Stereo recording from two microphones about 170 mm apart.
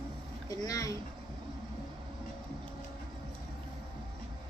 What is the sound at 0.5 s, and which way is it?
Speech, 20° left (ahead or behind).